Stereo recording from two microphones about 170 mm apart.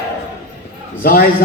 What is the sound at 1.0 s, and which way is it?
Speech, 60° left (ahead or behind).